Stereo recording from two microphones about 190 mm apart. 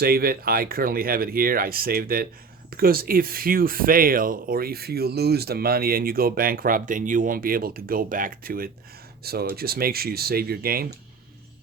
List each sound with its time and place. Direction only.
0.0 s speech: 50° right (ahead or behind)